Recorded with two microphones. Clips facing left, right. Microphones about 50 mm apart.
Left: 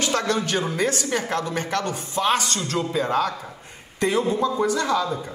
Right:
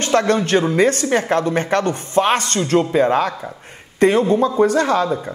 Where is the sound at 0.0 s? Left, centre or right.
Right.